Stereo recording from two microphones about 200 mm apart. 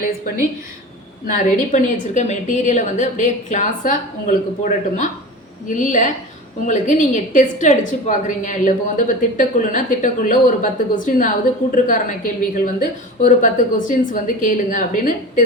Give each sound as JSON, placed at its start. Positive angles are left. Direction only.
{"t": 1.3, "sound": "a woman's voice", "side_deg": 40}